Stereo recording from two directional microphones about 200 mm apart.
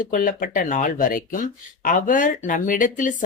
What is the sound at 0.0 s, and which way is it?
Speech, 45° left (ahead or behind).